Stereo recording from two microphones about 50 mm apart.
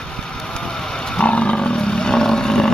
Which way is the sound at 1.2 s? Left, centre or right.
Left.